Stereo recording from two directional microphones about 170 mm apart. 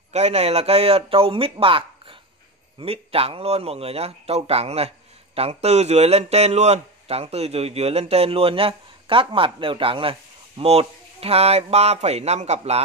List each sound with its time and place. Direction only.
0.1 s speech: 40° right (ahead or behind)